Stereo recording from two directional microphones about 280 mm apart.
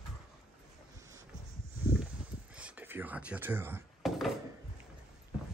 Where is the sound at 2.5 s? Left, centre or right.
Centre.